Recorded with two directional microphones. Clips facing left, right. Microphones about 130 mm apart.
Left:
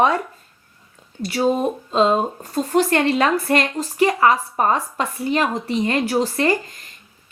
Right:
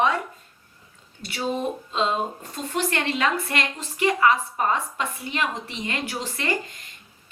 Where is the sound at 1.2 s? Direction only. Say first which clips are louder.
Left 8 dB; 40° left (ahead or behind).